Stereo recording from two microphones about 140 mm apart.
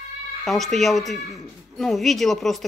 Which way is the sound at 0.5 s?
Centre (ahead or behind).